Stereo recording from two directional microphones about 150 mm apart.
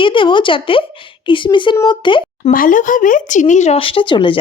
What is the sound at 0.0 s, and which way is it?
Speech, 35° left (ahead or behind).